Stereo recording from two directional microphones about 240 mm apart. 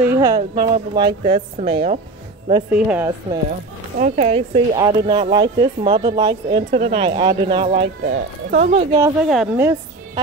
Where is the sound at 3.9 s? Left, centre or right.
Right.